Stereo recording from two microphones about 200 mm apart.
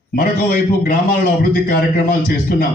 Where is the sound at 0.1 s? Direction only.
50° left (ahead or behind).